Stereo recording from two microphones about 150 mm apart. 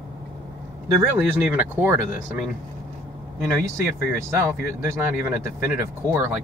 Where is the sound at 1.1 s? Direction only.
15° right (ahead or behind).